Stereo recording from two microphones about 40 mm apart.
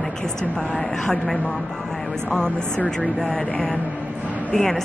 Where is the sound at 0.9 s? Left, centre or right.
Centre.